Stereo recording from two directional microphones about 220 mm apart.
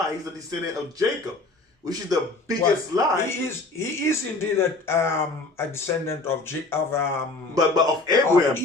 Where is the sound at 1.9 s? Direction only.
15° right (ahead or behind).